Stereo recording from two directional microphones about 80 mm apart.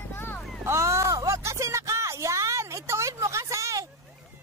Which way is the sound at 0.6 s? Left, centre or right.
Right.